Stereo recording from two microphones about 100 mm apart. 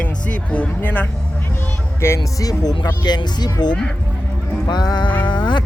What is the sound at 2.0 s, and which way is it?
Speech, 30° left (ahead or behind).